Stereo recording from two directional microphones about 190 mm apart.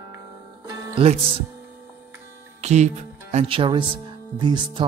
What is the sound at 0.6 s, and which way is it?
Music, 30° right (ahead or behind).